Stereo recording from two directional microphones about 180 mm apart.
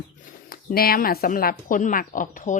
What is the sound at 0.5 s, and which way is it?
Speech, 55° left (ahead or behind).